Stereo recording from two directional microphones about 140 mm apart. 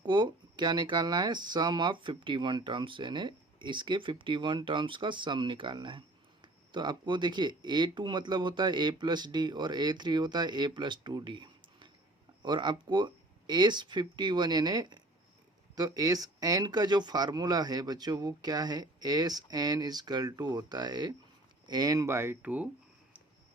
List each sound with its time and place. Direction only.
0.0 s speech: 35° right (ahead or behind); by 22.7 s 10° right (ahead or behind)